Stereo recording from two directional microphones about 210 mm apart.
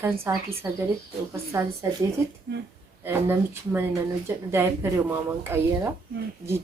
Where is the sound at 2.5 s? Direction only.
55° right (ahead or behind).